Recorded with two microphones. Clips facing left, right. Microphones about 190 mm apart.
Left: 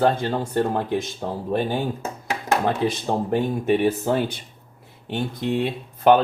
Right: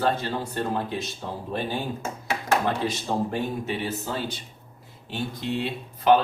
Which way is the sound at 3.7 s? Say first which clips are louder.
Left 10 dB; 55° left (ahead or behind).